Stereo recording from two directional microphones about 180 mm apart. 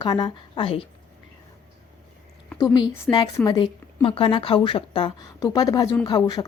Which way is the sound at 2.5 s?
25° left (ahead or behind).